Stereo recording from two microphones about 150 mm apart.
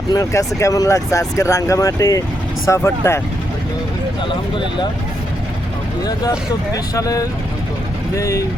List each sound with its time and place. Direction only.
0.1 s speech: 20° left (ahead or behind)
4.3 s speech: 35° left (ahead or behind)
6.9 s speech: 25° left (ahead or behind)